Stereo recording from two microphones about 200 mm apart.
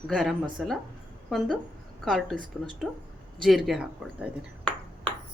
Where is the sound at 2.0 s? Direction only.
Centre (ahead or behind).